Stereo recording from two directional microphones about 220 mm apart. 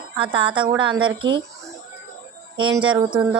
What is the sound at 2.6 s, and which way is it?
Speech, 20° right (ahead or behind).